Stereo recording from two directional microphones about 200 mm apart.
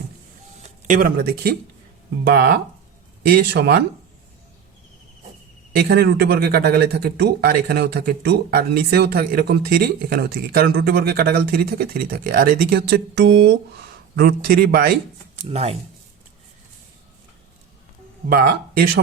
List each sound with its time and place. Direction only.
0.9 s speech: 45° right (ahead or behind)
5.7 s speech: 50° right (ahead or behind)
15.4 s speech: 30° right (ahead or behind)
18.3 s speech: 45° right (ahead or behind)